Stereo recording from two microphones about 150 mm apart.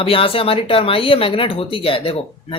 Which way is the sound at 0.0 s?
35° left (ahead or behind).